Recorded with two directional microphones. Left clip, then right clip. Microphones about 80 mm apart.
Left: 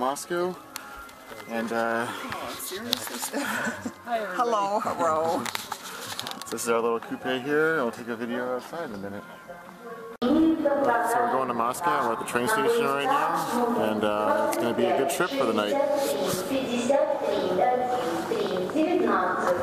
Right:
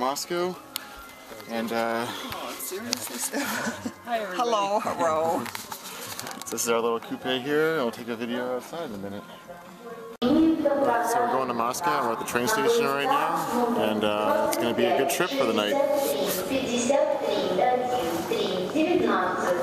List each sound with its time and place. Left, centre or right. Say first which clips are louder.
0.0 s speech: even; centre
1.5 s speech: even; centre
3.3 s speech: even; centre
6.5 s speech: even; centre
10.2 s a woman's voice: right 1 dB; centre
16.3 s a woman's voice: right 1 dB; right
17.8 s a sound: even; centre